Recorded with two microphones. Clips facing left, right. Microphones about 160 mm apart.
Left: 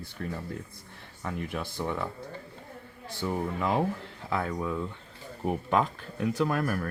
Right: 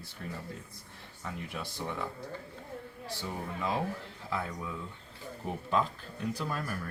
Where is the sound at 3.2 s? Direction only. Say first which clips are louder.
Left 7 dB; 60° left (ahead or behind).